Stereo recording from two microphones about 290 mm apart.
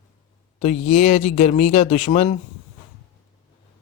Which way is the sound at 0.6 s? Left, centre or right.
Left.